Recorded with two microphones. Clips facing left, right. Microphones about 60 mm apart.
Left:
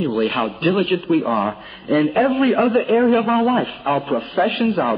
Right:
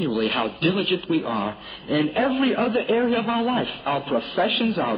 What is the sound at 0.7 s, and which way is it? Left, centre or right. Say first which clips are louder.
Speech: left 5 dB; left.